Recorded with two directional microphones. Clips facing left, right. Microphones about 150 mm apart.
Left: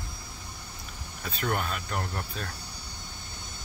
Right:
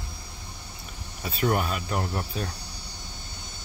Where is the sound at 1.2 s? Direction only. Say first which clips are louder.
Right 5 dB; 10° right (ahead or behind).